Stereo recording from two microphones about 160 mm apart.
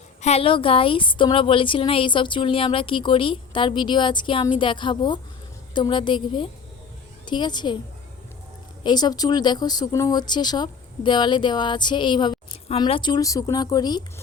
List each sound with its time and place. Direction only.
0.2 s a woman's voice: 40° left (ahead or behind)
8.8 s speech: 25° left (ahead or behind)